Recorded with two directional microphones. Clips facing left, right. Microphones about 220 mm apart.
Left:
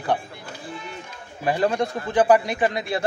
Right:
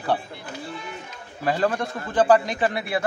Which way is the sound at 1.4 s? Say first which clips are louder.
Left 1 dB; 20° left (ahead or behind).